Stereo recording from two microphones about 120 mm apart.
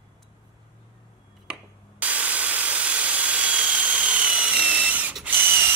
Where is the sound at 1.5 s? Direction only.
10° right (ahead or behind).